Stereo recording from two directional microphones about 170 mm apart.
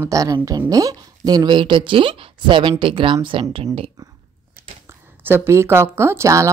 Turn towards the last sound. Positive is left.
turn(degrees=-15)  # may be behind; listen again after turning